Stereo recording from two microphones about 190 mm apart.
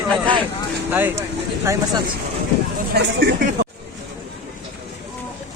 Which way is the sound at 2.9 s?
65° right (ahead or behind).